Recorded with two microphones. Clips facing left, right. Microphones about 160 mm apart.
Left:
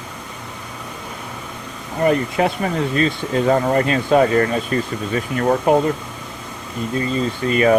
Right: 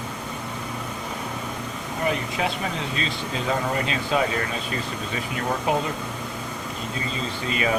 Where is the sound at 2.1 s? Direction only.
55° left (ahead or behind).